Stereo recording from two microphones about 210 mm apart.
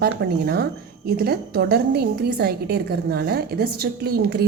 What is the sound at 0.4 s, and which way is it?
A woman's voice, 50° right (ahead or behind).